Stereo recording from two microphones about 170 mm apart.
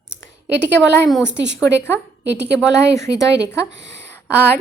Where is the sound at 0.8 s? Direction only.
10° left (ahead or behind).